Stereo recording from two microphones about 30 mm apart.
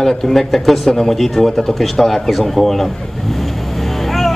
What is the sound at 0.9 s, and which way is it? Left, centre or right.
A man's voice, centre.